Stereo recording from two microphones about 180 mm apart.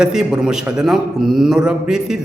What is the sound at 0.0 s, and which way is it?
A man's voice, 5° right (ahead or behind).